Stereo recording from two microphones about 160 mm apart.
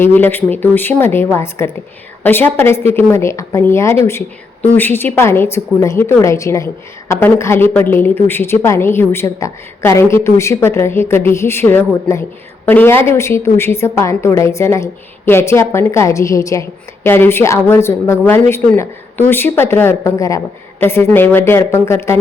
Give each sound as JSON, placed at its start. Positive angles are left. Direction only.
{"t": 0.0, "sound": "a woman's voice", "side_deg": 15}